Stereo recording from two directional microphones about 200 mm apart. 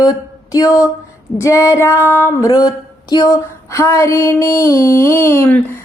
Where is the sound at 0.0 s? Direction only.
20° left (ahead or behind).